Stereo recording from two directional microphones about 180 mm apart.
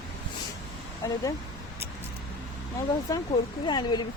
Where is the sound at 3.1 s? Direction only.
25° left (ahead or behind).